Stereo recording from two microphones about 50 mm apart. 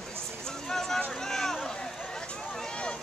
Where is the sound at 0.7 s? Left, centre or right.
Centre.